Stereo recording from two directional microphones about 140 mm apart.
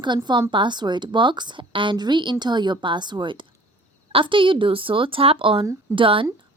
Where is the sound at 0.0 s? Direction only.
35° right (ahead or behind).